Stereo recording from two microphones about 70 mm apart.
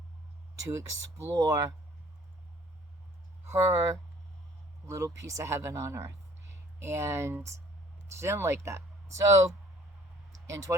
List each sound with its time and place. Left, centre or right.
0.6 s speech: right
3.5 s speech: right
10.3 s a sound: right